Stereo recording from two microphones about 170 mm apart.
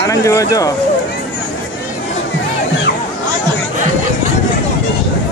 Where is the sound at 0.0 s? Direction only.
20° left (ahead or behind).